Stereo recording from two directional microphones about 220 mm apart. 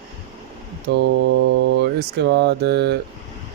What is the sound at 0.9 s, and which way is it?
Speech, 45° right (ahead or behind).